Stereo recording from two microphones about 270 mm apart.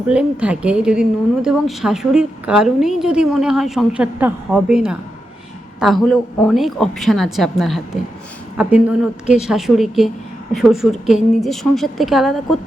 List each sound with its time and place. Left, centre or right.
0.1 s a woman's voice: centre